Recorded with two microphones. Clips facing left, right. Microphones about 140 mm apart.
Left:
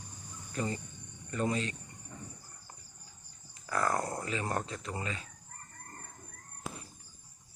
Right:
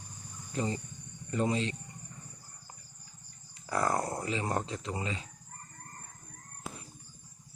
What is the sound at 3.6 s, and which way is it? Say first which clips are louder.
Speech: right 1 dB; 20° right (ahead or behind).